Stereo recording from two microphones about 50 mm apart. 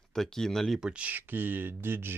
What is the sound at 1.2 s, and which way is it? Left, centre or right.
Speech, right.